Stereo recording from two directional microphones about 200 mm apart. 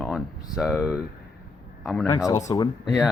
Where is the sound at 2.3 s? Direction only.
15° left (ahead or behind).